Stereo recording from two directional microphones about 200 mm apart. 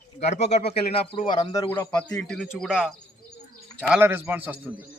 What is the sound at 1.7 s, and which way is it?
A man's voice, 5° left (ahead or behind).